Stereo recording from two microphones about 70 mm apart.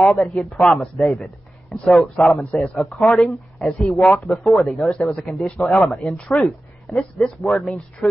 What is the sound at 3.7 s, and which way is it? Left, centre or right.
Speech, centre.